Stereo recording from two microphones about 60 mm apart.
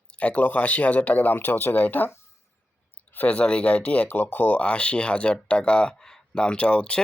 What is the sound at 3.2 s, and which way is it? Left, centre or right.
Speech, centre.